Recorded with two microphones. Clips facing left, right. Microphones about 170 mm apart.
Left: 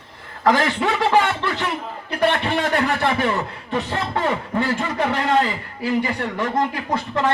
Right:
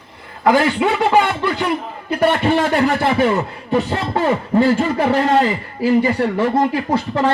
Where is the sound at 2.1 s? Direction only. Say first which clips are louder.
Right 5 dB; 25° right (ahead or behind).